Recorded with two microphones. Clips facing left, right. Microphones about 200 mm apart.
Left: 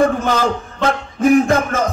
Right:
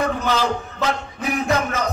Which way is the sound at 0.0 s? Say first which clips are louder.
Left 5 dB; 50° left (ahead or behind).